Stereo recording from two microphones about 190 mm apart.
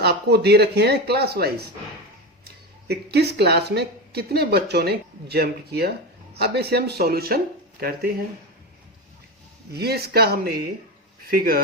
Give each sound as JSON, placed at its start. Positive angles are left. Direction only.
{"t": 0.0, "sound": "a woman's voice", "side_deg": -60}
{"t": 2.8, "sound": "a woman's voice", "side_deg": -60}
{"t": 9.7, "sound": "a woman's voice", "side_deg": -55}